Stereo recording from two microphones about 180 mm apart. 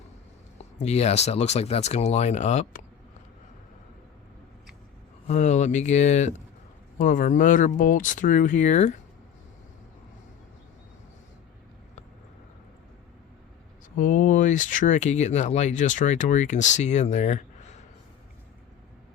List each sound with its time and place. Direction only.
0.6 s speech: 40° left (ahead or behind)
5.3 s speech: 40° left (ahead or behind)
13.9 s speech: 45° left (ahead or behind)